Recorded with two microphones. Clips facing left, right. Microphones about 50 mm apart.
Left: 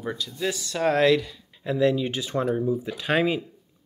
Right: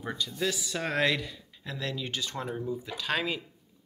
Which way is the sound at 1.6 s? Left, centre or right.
Centre.